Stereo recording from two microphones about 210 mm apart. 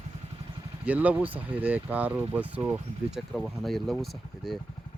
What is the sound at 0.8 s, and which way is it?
Speech, 5° right (ahead or behind).